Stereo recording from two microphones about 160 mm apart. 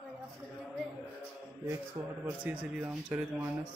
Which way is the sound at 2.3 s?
10° right (ahead or behind).